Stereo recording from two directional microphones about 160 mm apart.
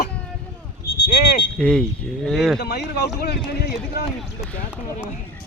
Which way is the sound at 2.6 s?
90° left.